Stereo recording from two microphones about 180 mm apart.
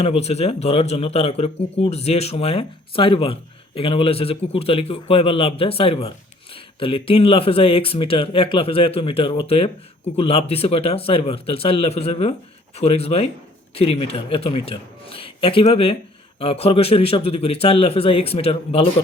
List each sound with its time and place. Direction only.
0.0 s a man's voice: 35° left (ahead or behind)